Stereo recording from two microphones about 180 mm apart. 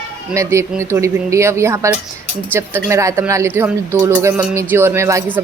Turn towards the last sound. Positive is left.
turn(degrees=-15)  # may be behind; listen again after turning